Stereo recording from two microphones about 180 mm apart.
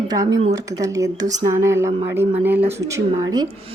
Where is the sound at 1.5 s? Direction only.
15° right (ahead or behind).